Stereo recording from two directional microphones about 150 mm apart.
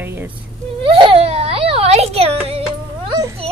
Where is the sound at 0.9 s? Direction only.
35° right (ahead or behind).